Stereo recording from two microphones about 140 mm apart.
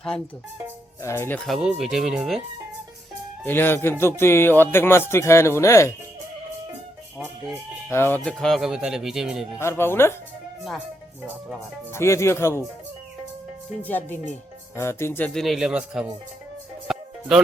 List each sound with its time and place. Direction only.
1.0 s speech: 20° left (ahead or behind)
1.4 s speech: centre (ahead or behind)
3.4 s speech: 15° left (ahead or behind)
7.9 s speech: 15° left (ahead or behind); by 9.6 s 5° right (ahead or behind)
9.6 s speech: 20° left (ahead or behind)
10.6 s speech: 5° right (ahead or behind)
11.9 s speech: 20° left (ahead or behind)
13.8 s speech: 10° left (ahead or behind)
15.3 s speech: centre (ahead or behind)
16.9 s music: 5° right (ahead or behind)